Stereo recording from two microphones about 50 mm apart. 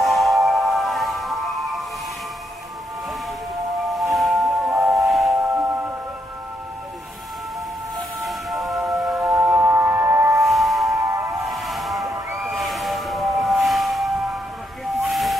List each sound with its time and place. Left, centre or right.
0.0 s music: centre
3.9 s a sound: centre
4.6 s music: centre
5.5 s music: right
8.2 s music: centre
8.8 s music: right
9.4 s a sound: right
10.4 s music: centre
11.4 s train: centre
12.4 s a sound: centre
14.9 s hiss: centre